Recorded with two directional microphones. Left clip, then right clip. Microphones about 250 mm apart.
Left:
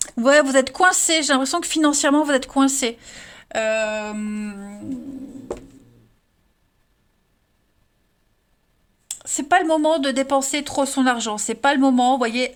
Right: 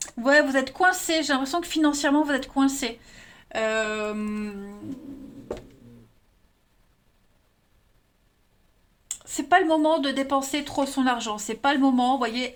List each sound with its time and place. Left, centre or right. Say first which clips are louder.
0.2 s speech: left 5 dB; left
9.0 s speech: left 3 dB; left